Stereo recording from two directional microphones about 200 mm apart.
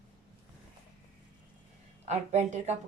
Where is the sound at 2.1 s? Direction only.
35° right (ahead or behind).